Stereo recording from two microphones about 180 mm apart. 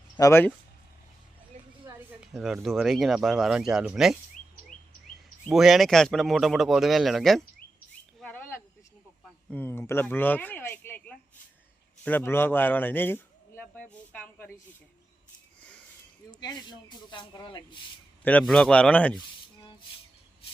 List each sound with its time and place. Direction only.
0.2 s speech: 15° left (ahead or behind)
2.2 s speech: centre (ahead or behind)
5.5 s speech: centre (ahead or behind)
8.2 s cricket: 10° left (ahead or behind)
9.5 s a man's voice: 10° left (ahead or behind)
16.4 s speech: 25° left (ahead or behind)
18.2 s speech: 10° left (ahead or behind)